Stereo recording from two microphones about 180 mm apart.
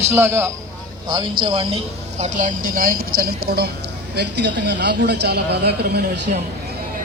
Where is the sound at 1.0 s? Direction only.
25° right (ahead or behind); by 6.3 s 65° right (ahead or behind).